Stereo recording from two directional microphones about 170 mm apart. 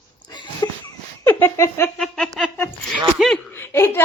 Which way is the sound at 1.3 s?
15° left (ahead or behind).